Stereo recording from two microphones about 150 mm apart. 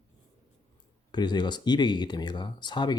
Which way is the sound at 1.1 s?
30° left (ahead or behind).